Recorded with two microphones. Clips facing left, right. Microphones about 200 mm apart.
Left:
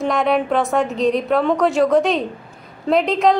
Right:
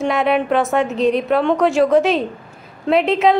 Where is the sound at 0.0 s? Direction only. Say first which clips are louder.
Right 1 dB; centre (ahead or behind).